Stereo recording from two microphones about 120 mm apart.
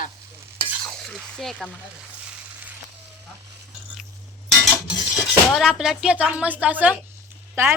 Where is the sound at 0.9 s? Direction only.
5° left (ahead or behind).